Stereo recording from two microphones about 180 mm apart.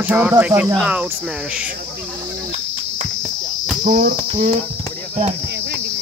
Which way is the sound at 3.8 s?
50° right (ahead or behind).